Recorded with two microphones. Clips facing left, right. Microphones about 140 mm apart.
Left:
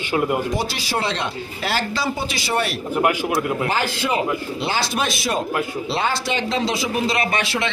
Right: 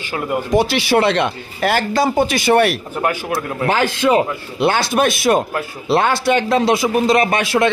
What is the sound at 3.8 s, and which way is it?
Speech, 50° right (ahead or behind).